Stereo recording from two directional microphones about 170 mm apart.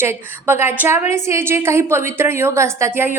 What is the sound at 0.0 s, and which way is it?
A woman's voice, 15° right (ahead or behind).